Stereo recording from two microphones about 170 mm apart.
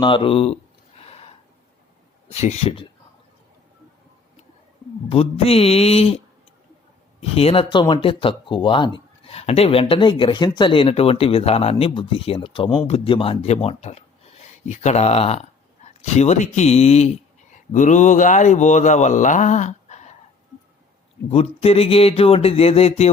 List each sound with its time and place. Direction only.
0.0 s a sound: 30° left (ahead or behind)
2.3 s speech: 40° left (ahead or behind)
5.0 s speech: 35° left (ahead or behind)
21.2 s speech: 35° left (ahead or behind)